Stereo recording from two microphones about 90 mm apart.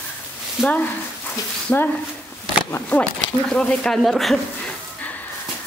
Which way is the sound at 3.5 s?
10° left (ahead or behind).